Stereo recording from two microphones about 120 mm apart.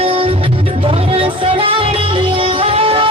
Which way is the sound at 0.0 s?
50° right (ahead or behind).